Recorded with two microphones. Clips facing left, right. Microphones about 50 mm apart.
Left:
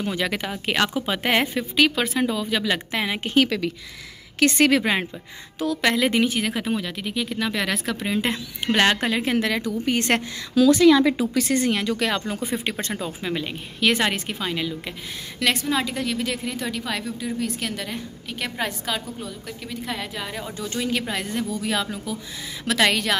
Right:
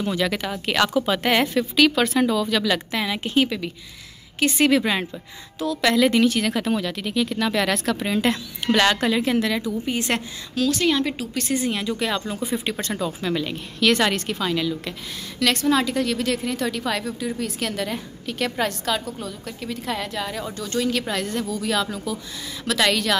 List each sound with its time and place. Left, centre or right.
0.0 s a woman's voice: left
0.5 s a woman's voice: left
2.0 s a woman's voice: centre
2.9 s a woman's voice: left
3.3 s speech: left
4.4 s speech: left
5.6 s a woman's voice: left; by 8.2 s centre
8.2 s a woman's voice: left
11.4 s speech: left
12.4 s a woman's voice: left
13.0 s a woman's voice: left
15.5 s a woman's voice: centre
20.5 s a woman's voice: left